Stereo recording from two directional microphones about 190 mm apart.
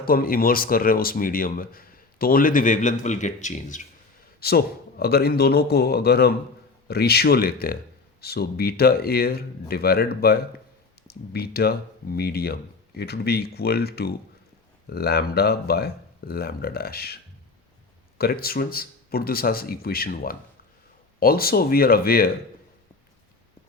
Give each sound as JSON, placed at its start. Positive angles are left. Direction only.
{"t": 0.0, "sound": "speech", "side_deg": 50}
{"t": 4.4, "sound": "speech", "side_deg": 55}
{"t": 18.2, "sound": "speech", "side_deg": 50}